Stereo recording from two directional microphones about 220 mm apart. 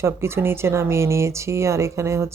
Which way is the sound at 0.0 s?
10° right (ahead or behind).